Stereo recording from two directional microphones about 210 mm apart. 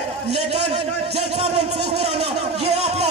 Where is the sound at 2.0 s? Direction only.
30° right (ahead or behind).